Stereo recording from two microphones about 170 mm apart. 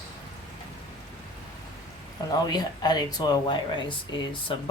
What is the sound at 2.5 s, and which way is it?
Speech, 25° left (ahead or behind).